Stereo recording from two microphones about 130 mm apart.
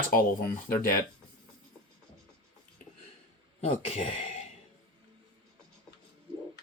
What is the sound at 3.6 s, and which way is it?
Speech, 50° left (ahead or behind).